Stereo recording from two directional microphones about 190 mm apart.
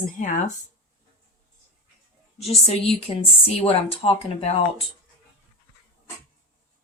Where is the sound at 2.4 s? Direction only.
30° left (ahead or behind).